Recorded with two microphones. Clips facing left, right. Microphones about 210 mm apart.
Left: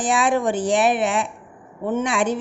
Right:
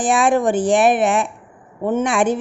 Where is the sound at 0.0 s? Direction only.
50° right (ahead or behind).